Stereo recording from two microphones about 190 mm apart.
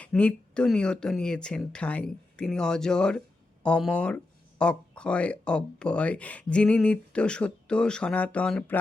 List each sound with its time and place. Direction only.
0.0 s speech: 5° left (ahead or behind)